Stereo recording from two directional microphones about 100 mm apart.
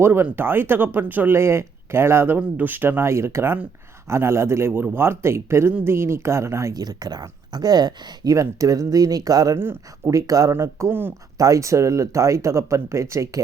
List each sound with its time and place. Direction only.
0.0 s speech: 20° right (ahead or behind); by 9.6 s 40° right (ahead or behind)
9.6 s speech: 25° right (ahead or behind)
10.2 s speech: 35° right (ahead or behind)
11.3 s speech: 35° right (ahead or behind)